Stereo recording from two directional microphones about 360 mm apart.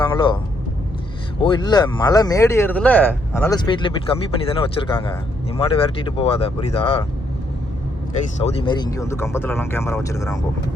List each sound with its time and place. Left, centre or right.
0.1 s speech: centre
1.4 s speech: centre
8.4 s speech: centre